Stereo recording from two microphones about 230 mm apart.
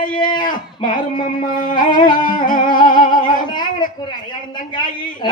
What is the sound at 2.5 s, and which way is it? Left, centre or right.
Music, left.